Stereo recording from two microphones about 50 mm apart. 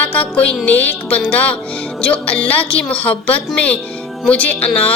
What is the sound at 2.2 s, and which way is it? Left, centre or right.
Speech, left.